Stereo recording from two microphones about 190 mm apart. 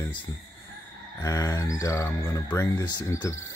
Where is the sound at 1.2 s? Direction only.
15° left (ahead or behind).